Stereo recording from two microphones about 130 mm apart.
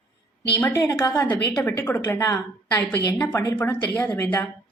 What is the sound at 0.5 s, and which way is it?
A woman's voice, 20° left (ahead or behind).